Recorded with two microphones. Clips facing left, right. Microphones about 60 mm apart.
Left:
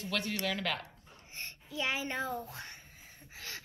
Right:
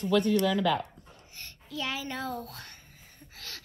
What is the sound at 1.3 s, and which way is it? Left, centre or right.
A child's voice, left.